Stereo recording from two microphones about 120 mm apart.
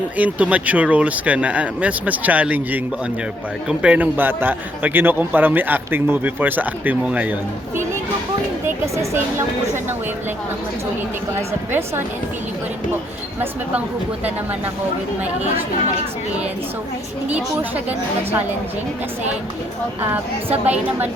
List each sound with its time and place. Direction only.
0.2 s a man's voice: 10° right (ahead or behind)
8.6 s speech: 20° right (ahead or behind)
15.2 s a man's voice: 15° right (ahead or behind)
17.2 s a man's voice: 10° right (ahead or behind)
20.0 s a man's voice: 15° right (ahead or behind)